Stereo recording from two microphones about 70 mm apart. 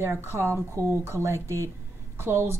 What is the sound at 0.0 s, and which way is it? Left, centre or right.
A woman's voice, right.